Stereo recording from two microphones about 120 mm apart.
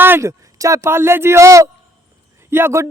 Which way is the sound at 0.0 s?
20° right (ahead or behind).